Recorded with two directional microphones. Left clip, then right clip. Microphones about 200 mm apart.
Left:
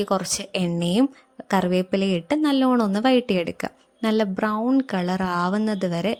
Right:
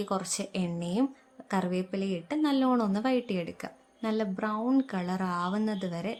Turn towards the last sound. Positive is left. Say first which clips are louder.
# left 10 dB
turn(degrees=35)  # may be behind; listen again after turning